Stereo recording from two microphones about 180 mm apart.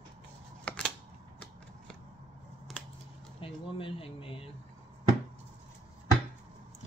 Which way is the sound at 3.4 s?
30° left (ahead or behind).